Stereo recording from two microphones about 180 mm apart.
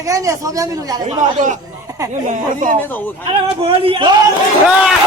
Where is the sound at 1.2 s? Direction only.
45° right (ahead or behind).